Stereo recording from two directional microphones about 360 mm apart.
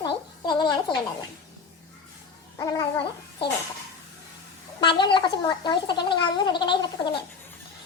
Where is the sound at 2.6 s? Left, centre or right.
Centre.